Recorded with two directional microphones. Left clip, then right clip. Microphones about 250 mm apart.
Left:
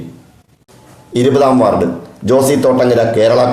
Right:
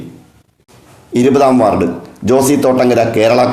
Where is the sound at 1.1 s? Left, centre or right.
Right.